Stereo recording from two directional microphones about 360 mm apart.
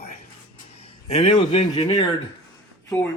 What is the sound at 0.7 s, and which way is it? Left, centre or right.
Speech, centre.